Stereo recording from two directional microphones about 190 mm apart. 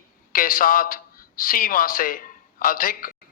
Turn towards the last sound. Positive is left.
turn(degrees=45)  # may be behind; listen again after turning